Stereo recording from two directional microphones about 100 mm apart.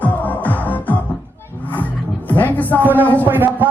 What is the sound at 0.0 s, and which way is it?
Music, 15° left (ahead or behind).